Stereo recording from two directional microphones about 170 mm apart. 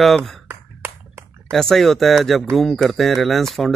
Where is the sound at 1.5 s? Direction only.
Centre (ahead or behind).